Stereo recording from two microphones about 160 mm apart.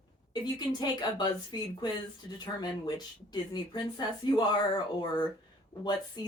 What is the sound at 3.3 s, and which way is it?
Speech, 25° left (ahead or behind).